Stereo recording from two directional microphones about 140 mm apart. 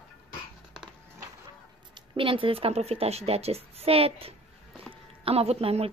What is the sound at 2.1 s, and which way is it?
A child's voice, 40° right (ahead or behind).